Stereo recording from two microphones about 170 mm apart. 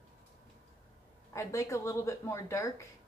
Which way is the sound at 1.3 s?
15° left (ahead or behind).